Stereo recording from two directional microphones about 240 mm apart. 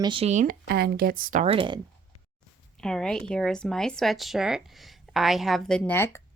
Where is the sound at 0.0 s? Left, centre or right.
Right.